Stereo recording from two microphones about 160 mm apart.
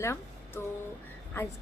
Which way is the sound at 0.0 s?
15° left (ahead or behind).